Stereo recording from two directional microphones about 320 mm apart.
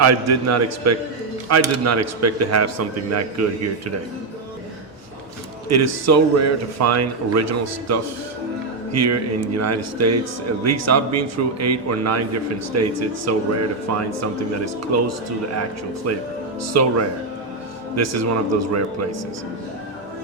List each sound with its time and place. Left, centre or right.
0.0 s a man's voice: right
5.6 s a man's voice: right
17.9 s a man's voice: right